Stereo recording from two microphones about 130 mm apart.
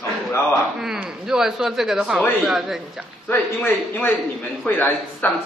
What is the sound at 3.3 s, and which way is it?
A man's voice, 15° left (ahead or behind).